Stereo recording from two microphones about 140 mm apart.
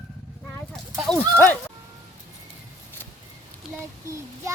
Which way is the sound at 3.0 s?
15° left (ahead or behind).